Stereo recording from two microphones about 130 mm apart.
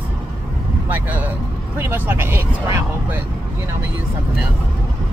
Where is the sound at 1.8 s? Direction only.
15° right (ahead or behind).